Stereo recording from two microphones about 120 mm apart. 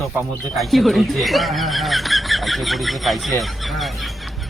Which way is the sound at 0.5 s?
Centre (ahead or behind).